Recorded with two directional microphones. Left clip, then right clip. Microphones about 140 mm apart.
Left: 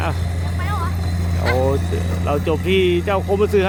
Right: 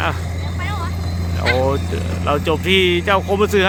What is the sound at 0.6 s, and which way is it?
Vehicle, 40° left (ahead or behind).